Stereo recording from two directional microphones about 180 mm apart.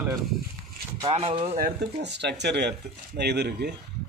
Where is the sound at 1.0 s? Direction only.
35° right (ahead or behind).